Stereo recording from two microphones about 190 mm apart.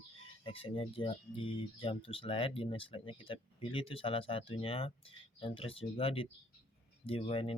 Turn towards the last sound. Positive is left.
turn(degrees=30)  # may be behind; listen again after turning